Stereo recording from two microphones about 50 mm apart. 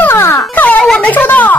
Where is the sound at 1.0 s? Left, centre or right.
Left.